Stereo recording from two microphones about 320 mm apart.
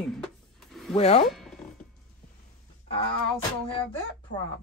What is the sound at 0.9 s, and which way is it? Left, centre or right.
Speech, centre.